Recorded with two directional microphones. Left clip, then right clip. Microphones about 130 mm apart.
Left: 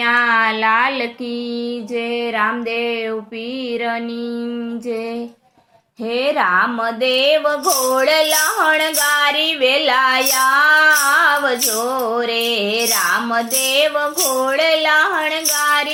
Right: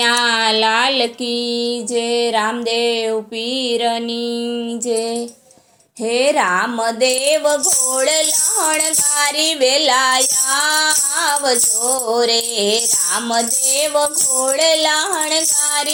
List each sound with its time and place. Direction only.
0.3 s a sound: 20° left (ahead or behind)
6.1 s speech: 20° right (ahead or behind)
12.1 s speech: 25° right (ahead or behind)
14.4 s speech: 30° right (ahead or behind)